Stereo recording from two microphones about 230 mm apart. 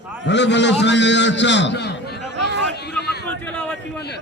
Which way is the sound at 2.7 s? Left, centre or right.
Left.